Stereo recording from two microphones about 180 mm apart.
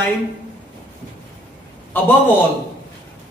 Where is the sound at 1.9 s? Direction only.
10° left (ahead or behind).